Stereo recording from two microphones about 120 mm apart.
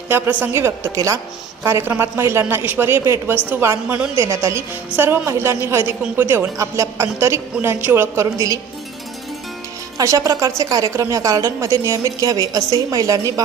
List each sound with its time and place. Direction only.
0.1 s a woman's voice: 15° right (ahead or behind)
10.0 s a woman's voice: 25° right (ahead or behind)